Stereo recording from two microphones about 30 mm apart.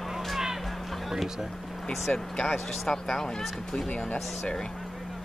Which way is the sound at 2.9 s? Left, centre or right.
Left.